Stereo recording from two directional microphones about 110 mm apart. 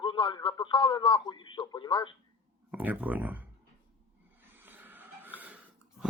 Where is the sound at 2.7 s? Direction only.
15° right (ahead or behind).